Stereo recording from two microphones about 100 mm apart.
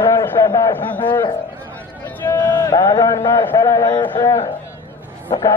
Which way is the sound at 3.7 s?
35° left (ahead or behind).